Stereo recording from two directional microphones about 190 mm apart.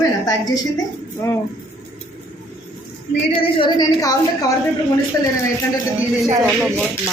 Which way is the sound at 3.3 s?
25° left (ahead or behind).